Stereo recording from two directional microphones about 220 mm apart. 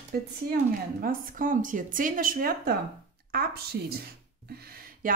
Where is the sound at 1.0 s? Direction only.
40° right (ahead or behind).